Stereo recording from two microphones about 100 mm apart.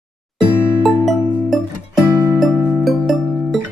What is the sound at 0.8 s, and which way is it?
Music, centre (ahead or behind).